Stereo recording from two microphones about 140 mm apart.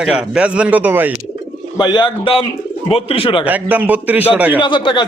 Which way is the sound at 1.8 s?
30° left (ahead or behind).